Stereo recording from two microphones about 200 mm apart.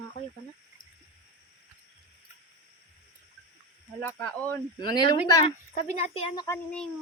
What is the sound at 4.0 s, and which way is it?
Speech, 5° left (ahead or behind).